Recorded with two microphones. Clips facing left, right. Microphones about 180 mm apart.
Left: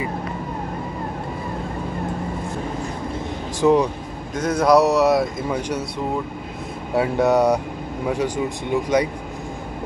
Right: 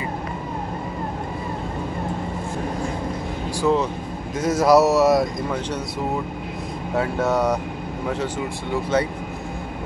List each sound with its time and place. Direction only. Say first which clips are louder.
3.6 s speech: left 4 dB; 15° left (ahead or behind)
4.4 s speech: even; 5° right (ahead or behind)
7.0 s speech: left 4 dB; 15° left (ahead or behind)
8.8 s speech: left 1 dB; 15° left (ahead or behind)